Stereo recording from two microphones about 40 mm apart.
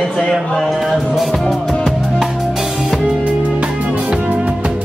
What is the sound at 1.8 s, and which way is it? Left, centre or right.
Drum kit, centre.